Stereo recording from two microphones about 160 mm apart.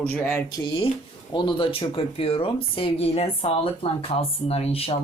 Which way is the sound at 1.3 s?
30° left (ahead or behind).